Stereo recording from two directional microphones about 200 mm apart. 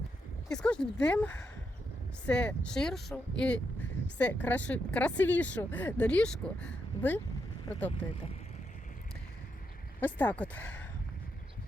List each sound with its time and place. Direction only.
0.5 s speech: 5° left (ahead or behind)
7.7 s speech: 15° left (ahead or behind)
10.0 s speech: 10° left (ahead or behind)